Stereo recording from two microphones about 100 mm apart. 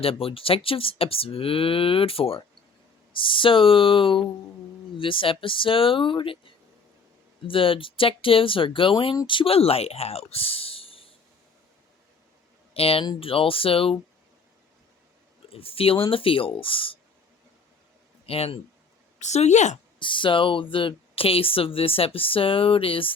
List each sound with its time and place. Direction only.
0.0 s speech: 70° left (ahead or behind)
3.2 s speech: 60° left (ahead or behind)
12.7 s speech: 75° left (ahead or behind)
15.4 s speech: 70° left (ahead or behind)
18.3 s speech: 80° left
20.0 s speech: 55° left (ahead or behind)